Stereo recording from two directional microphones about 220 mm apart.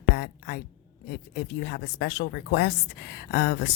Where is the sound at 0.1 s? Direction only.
50° left (ahead or behind).